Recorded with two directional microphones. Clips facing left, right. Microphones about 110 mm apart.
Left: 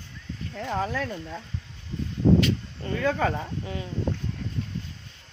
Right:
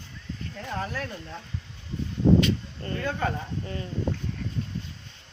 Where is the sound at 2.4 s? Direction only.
Centre (ahead or behind).